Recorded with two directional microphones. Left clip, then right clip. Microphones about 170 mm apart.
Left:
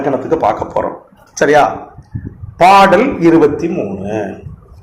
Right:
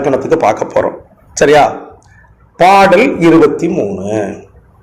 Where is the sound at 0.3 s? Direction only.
45° right (ahead or behind).